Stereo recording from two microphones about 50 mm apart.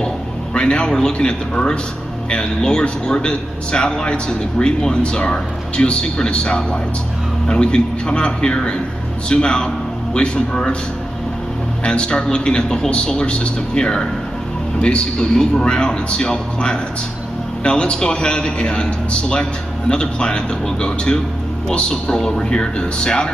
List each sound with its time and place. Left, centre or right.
0.6 s a man's voice: centre
11.8 s a man's voice: centre